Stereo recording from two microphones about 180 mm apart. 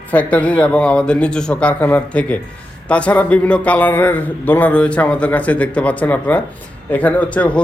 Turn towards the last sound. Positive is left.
turn(degrees=5)  # may be behind; listen again after turning